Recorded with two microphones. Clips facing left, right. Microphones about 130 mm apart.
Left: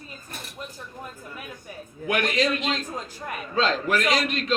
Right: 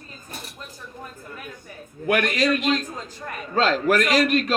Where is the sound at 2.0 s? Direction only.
50° right (ahead or behind).